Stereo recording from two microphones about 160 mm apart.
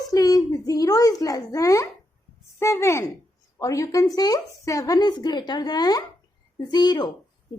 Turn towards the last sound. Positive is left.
turn(degrees=25)  # may be behind; listen again after turning